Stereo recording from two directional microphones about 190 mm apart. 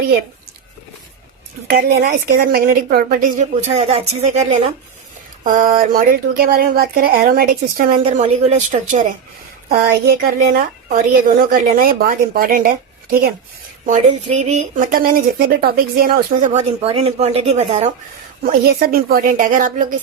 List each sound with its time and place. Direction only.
1.7 s speech: 55° right (ahead or behind)
9.6 s speech: 55° right (ahead or behind)
13.8 s speech: 35° right (ahead or behind)
18.4 s speech: 50° right (ahead or behind)